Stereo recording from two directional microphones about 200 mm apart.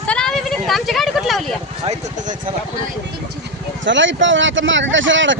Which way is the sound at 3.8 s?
65° right (ahead or behind).